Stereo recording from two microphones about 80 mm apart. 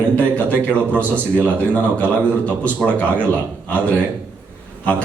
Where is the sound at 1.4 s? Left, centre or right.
Centre.